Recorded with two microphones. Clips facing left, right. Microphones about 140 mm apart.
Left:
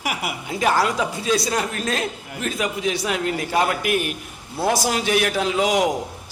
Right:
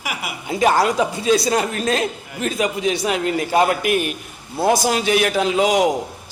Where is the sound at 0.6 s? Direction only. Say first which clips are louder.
Right 3 dB; 25° right (ahead or behind).